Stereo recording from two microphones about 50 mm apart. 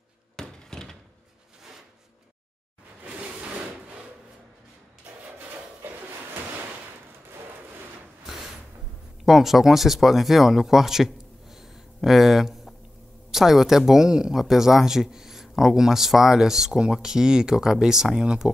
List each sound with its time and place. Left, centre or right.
0.4 s thunk: centre
3.0 s wood: right
5.8 s a sound: right
9.2 s speech: centre